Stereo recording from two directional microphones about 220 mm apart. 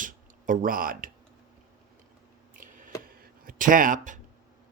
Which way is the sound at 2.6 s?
40° right (ahead or behind).